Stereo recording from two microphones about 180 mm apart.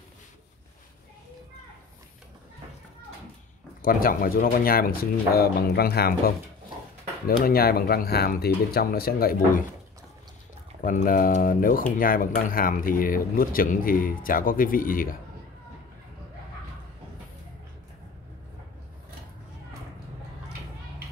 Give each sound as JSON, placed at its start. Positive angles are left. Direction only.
{"t": 3.8, "sound": "speech", "side_deg": 50}
{"t": 10.8, "sound": "speech", "side_deg": 50}